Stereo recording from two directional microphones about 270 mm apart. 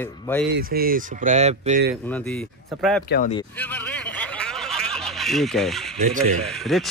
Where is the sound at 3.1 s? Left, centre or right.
Left.